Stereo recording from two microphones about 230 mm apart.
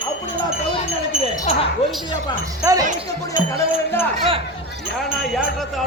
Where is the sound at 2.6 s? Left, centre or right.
Centre.